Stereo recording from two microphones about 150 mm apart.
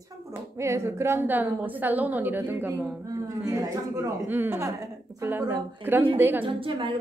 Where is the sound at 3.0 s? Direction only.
25° right (ahead or behind).